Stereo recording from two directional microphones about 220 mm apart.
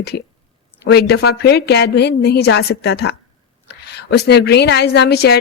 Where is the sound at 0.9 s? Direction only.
50° left (ahead or behind).